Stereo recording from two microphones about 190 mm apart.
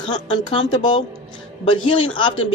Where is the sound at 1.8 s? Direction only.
25° left (ahead or behind).